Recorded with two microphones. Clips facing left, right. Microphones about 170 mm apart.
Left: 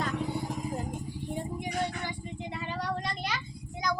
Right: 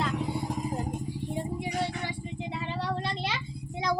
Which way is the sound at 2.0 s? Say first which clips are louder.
Right 2 dB; 25° right (ahead or behind).